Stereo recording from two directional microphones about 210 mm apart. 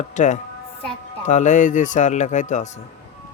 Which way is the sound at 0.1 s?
35° left (ahead or behind).